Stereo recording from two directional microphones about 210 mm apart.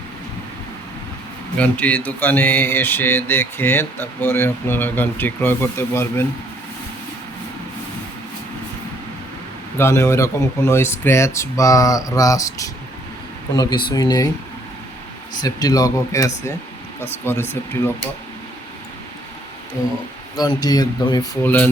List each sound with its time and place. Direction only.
1.5 s speech: 5° left (ahead or behind)
9.7 s speech: 15° left (ahead or behind)
15.4 s speech: 20° left (ahead or behind)
17.5 s speech: 10° left (ahead or behind)
20.3 s speech: 20° left (ahead or behind)